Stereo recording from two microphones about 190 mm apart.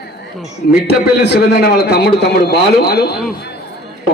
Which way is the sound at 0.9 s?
60° left (ahead or behind).